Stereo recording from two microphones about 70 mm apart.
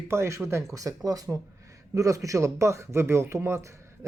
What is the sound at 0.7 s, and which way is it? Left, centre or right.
Speech, right.